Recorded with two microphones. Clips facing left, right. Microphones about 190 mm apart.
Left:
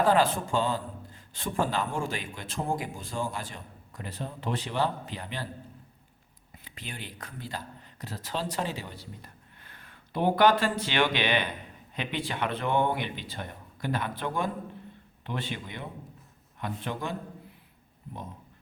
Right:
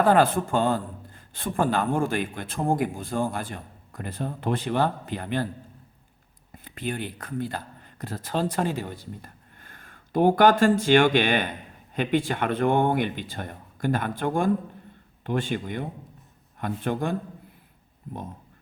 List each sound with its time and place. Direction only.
0.0 s a man's voice: 55° right (ahead or behind)
6.7 s a man's voice: 50° right (ahead or behind)